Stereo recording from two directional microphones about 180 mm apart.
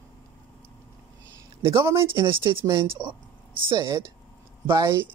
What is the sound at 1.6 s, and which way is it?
Speech, 15° right (ahead or behind).